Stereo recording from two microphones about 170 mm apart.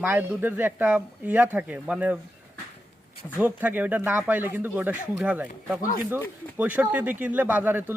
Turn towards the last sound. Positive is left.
turn(degrees=-10)  # may be behind; listen again after turning